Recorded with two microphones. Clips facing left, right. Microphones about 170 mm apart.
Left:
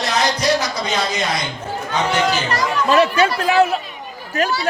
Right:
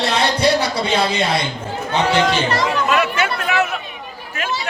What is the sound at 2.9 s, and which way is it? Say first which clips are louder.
Speech: left 4 dB; 30° left (ahead or behind).